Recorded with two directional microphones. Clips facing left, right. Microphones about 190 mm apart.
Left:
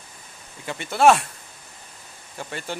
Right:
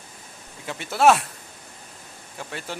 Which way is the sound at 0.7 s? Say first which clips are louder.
Left 1 dB; centre (ahead or behind).